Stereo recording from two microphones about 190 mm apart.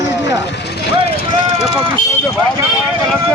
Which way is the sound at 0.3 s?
65° left (ahead or behind).